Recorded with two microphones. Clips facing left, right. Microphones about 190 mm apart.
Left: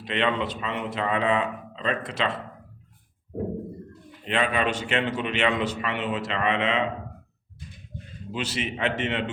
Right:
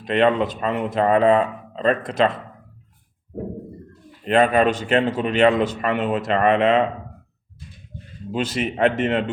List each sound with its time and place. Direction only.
0.0 s a man's voice: 45° right (ahead or behind)
4.3 s a man's voice: 45° right (ahead or behind)
8.3 s a man's voice: 50° right (ahead or behind)